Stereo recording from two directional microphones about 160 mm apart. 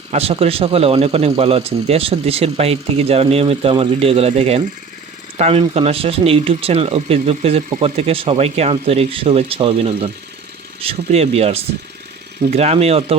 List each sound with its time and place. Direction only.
0.1 s speech: 40° right (ahead or behind)